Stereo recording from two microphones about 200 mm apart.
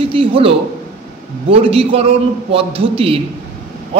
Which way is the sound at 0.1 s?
25° right (ahead or behind).